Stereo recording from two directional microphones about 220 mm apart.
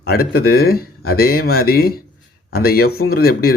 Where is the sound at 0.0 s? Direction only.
45° left (ahead or behind).